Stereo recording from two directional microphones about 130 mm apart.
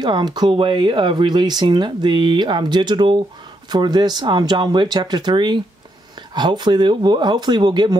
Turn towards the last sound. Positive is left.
turn(degrees=-35)  # may be behind; listen again after turning